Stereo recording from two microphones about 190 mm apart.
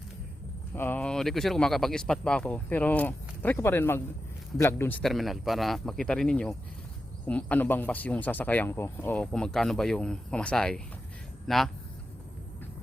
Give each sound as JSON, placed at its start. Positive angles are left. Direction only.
{"t": 0.7, "sound": "speech", "side_deg": 10}